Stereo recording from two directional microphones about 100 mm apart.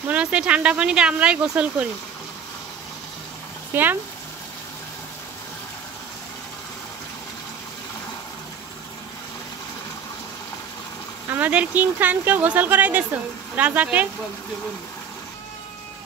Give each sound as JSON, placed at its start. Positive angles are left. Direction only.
{"t": 0.1, "sound": "speech", "side_deg": -10}
{"t": 3.7, "sound": "speech", "side_deg": -20}
{"t": 11.3, "sound": "speech", "side_deg": -15}